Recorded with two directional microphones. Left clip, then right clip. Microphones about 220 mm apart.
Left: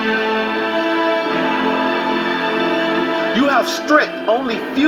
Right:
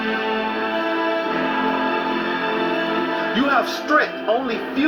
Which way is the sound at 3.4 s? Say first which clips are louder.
Left 3 dB; 50° left (ahead or behind).